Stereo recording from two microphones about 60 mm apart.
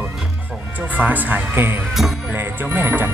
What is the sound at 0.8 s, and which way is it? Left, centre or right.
Music, right.